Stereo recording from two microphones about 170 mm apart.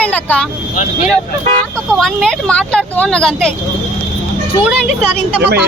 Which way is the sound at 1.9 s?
Centre (ahead or behind).